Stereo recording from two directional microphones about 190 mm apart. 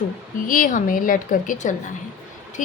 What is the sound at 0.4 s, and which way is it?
A woman's voice, 45° left (ahead or behind).